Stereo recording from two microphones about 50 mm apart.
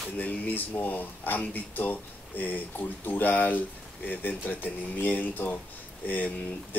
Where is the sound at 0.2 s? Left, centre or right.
Left.